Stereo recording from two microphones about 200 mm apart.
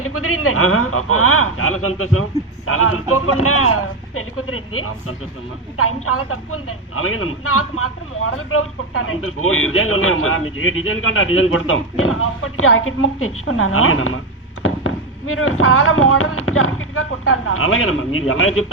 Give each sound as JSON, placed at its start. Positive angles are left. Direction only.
{"t": 0.0, "sound": "a man's voice", "side_deg": 90}